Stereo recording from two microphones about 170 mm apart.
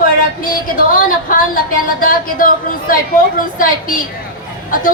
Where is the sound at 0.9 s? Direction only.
55° left (ahead or behind).